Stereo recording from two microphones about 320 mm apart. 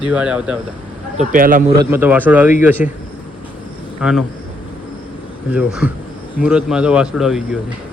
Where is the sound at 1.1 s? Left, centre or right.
Right.